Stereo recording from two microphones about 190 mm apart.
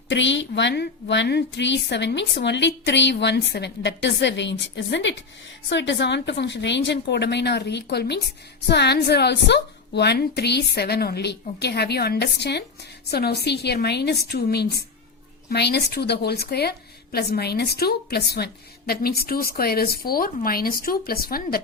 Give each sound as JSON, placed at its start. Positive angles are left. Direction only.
{"t": 0.1, "sound": "a woman's voice", "side_deg": 70}